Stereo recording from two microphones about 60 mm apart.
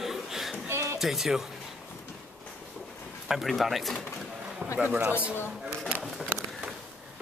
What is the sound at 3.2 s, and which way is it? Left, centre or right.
Speech, centre.